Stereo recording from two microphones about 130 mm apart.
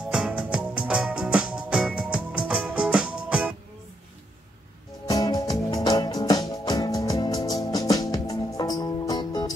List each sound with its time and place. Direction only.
0.1 s music: 10° right (ahead or behind)
5.0 s music: 30° left (ahead or behind)